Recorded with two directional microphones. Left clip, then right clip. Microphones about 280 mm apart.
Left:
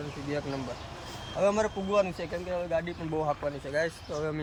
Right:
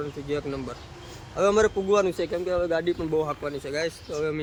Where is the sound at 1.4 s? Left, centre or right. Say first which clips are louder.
Right 6 dB; centre.